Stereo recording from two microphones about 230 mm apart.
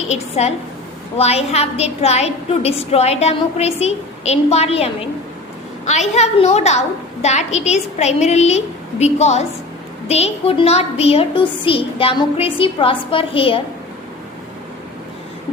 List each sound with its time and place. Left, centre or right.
0.1 s a woman's voice: left